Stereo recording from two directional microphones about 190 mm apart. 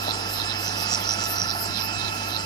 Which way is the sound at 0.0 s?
20° left (ahead or behind).